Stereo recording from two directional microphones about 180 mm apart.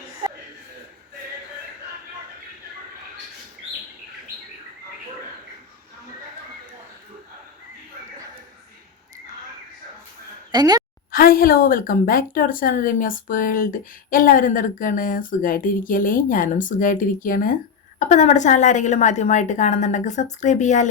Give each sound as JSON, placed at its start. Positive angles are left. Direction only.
{"t": 10.5, "sound": "a woman's voice", "side_deg": -20}
{"t": 11.1, "sound": "a woman's voice", "side_deg": 55}